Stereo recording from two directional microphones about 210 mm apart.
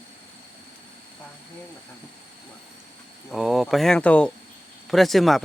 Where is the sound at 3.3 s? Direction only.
Centre (ahead or behind).